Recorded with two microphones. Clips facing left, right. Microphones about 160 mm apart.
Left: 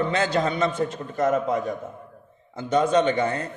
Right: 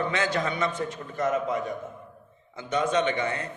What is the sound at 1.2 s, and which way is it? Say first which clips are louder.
Speech: left 4 dB; 45° left (ahead or behind).